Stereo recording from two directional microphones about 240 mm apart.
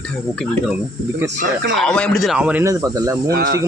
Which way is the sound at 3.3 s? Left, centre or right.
Right.